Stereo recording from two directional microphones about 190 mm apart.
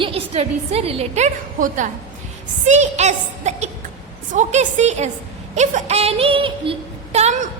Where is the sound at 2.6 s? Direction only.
35° right (ahead or behind).